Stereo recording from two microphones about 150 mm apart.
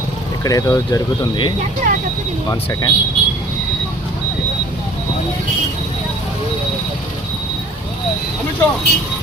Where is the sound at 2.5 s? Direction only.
25° left (ahead or behind).